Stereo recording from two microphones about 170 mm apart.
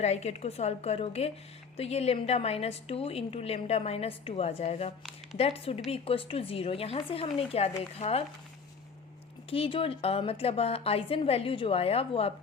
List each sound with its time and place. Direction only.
0.0 s a woman's voice: 40° left (ahead or behind)
9.5 s a woman's voice: 30° left (ahead or behind)